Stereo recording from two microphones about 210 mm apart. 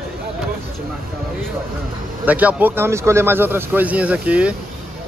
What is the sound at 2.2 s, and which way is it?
A man's voice, 5° right (ahead or behind).